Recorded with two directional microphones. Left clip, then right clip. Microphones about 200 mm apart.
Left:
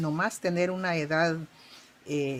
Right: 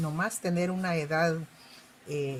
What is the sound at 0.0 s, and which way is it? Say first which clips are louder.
Speech: left 3 dB; 30° left (ahead or behind).